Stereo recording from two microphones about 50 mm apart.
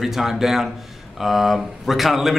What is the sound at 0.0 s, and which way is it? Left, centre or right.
A man's voice, centre.